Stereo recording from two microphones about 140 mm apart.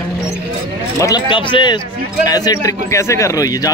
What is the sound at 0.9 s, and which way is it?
Speech, 25° left (ahead or behind).